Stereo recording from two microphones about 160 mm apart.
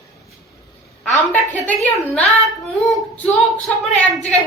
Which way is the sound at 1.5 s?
10° left (ahead or behind).